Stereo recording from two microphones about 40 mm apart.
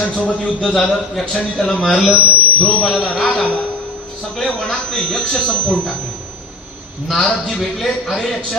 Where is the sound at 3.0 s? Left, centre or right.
Left.